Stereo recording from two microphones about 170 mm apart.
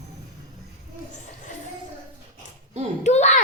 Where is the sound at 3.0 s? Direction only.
40° left (ahead or behind).